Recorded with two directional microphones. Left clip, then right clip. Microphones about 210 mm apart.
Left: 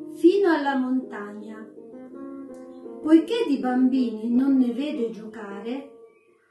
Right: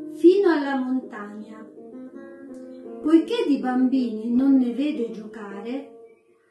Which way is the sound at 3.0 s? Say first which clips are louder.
Even; 20° left (ahead or behind).